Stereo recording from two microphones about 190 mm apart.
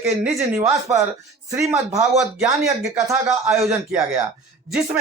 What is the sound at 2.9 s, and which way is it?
A woman's voice, 10° right (ahead or behind).